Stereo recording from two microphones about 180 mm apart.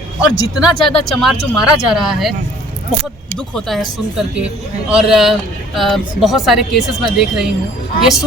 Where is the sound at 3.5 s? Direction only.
Centre (ahead or behind).